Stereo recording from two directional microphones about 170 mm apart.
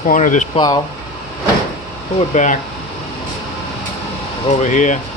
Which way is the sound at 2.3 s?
45° left (ahead or behind).